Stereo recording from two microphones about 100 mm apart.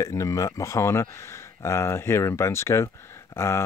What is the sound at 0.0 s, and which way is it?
Speech, 30° left (ahead or behind).